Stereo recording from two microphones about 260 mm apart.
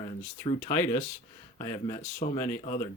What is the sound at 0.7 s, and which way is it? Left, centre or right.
Speech, centre.